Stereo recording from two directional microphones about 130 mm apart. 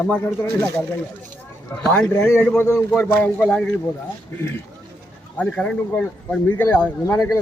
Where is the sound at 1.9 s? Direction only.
5° left (ahead or behind).